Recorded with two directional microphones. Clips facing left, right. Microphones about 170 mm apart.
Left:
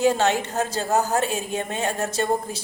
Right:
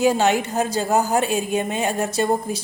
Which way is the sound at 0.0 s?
15° right (ahead or behind).